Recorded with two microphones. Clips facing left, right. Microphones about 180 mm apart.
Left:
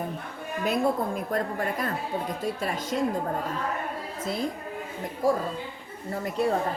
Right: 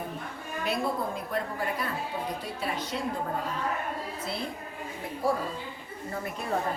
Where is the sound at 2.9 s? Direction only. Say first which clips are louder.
Left 10 dB; 45° left (ahead or behind).